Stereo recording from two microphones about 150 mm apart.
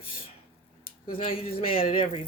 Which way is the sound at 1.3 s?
40° left (ahead or behind).